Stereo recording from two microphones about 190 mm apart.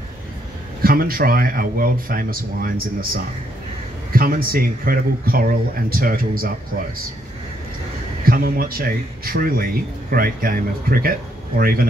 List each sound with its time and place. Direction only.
0.8 s speech: 50° right (ahead or behind)
4.1 s speech: 50° right (ahead or behind)
8.3 s speech: 50° right (ahead or behind)